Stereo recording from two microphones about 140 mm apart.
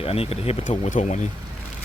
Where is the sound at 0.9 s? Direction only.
60° left (ahead or behind).